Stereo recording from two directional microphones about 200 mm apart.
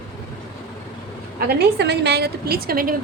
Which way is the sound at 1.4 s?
55° right (ahead or behind).